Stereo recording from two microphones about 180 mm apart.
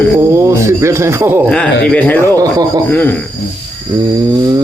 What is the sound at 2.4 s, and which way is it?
Speech, 20° right (ahead or behind).